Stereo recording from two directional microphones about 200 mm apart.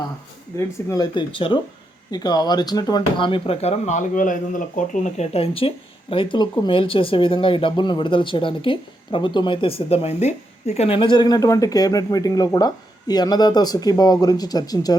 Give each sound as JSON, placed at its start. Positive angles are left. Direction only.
{"t": 0.9, "sound": "speech", "side_deg": 20}